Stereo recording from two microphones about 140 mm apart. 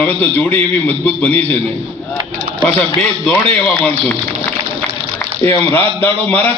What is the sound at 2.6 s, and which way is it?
A man's voice, 10° left (ahead or behind).